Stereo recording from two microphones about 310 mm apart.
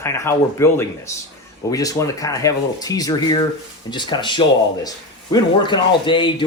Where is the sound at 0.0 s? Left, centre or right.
Centre.